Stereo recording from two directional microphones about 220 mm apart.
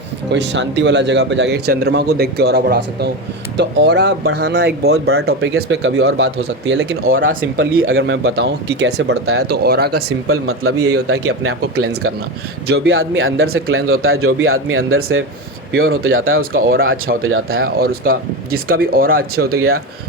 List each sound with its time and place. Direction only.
0.3 s speech: 55° right (ahead or behind)
7.2 s speech: 40° right (ahead or behind)
7.6 s speech: 65° right (ahead or behind)
9.4 s speech: 45° right (ahead or behind)
10.1 s speech: 75° right (ahead or behind)
12.6 s speech: 45° right (ahead or behind)
12.9 s speech: 65° right (ahead or behind)
16.4 s speech: 40° right (ahead or behind)
17.2 s speech: 70° right (ahead or behind)
17.7 s speech: 45° right (ahead or behind)